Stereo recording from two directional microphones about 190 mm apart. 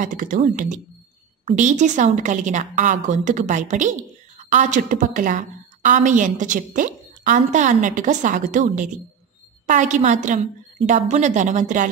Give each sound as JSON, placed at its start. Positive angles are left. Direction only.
{"t": 0.0, "sound": "a woman's voice", "side_deg": -45}